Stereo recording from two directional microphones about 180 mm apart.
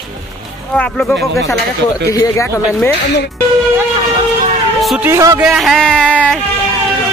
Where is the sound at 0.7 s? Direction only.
5° left (ahead or behind).